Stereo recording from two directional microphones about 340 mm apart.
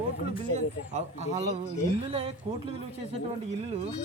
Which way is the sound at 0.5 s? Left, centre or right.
Centre.